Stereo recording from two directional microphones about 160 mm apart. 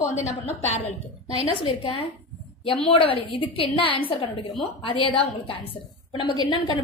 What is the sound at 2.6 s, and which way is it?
A woman's voice, 35° left (ahead or behind).